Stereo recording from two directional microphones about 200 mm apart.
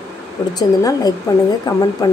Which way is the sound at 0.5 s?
20° left (ahead or behind).